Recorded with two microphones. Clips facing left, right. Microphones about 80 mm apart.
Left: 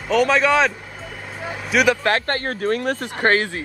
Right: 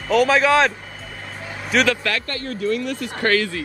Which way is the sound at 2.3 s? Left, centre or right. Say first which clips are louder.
Left 2 dB; left.